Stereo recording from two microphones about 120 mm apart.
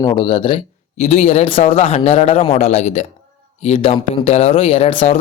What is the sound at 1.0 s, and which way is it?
A man's voice, 60° left (ahead or behind).